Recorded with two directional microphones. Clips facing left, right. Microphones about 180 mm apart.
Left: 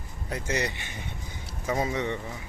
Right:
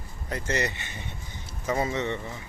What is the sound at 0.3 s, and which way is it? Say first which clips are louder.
A man's voice: right 1 dB; 10° left (ahead or behind).